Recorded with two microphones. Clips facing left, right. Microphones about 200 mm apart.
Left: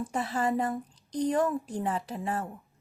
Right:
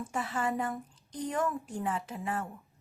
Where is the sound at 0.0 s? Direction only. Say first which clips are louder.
Left 4 dB; 35° left (ahead or behind).